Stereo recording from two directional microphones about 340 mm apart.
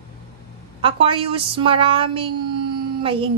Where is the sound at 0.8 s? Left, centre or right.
Centre.